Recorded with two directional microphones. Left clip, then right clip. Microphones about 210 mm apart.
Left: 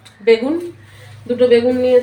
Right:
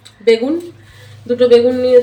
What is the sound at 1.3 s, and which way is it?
Speech, 10° right (ahead or behind).